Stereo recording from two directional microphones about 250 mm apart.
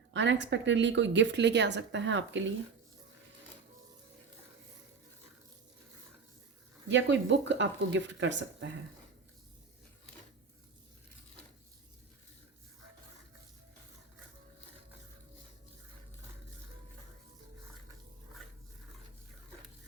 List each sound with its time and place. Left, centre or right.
0.1 s speech: right
6.8 s speech: right